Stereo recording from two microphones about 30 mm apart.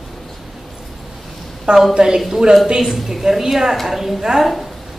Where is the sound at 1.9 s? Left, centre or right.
Centre.